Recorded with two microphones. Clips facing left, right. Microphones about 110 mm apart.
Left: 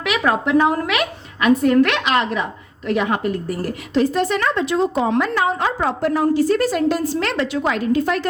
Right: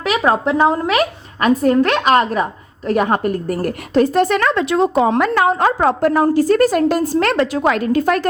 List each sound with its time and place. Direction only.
0.2 s a woman's voice: 30° right (ahead or behind); by 5.0 s 65° right (ahead or behind)
5.0 s a woman's voice: 50° right (ahead or behind)